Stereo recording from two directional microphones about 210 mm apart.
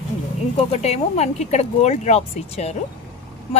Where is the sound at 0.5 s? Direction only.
30° left (ahead or behind).